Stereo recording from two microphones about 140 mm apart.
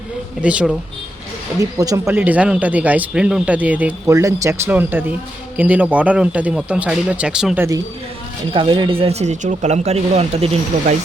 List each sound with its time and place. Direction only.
0.4 s speech: 10° right (ahead or behind)
1.5 s speech: 25° right (ahead or behind)
2.1 s speech: 10° right (ahead or behind)
4.0 s speech: 25° right (ahead or behind); by 7.6 s 5° right (ahead or behind)
8.5 s speech: 35° right (ahead or behind)